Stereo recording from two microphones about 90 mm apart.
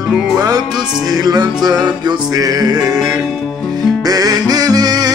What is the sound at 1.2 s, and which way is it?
Music, 50° right (ahead or behind).